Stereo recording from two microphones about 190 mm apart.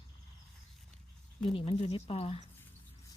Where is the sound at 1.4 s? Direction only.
30° left (ahead or behind).